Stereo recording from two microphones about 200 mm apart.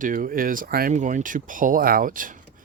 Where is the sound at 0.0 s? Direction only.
45° right (ahead or behind).